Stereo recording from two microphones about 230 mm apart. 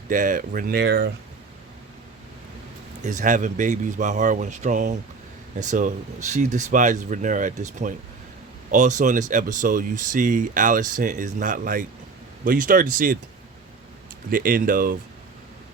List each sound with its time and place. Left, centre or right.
0.1 s speech: right
3.0 s speech: right
14.3 s speech: right